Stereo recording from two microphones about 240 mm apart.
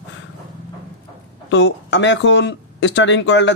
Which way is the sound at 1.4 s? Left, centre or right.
Left.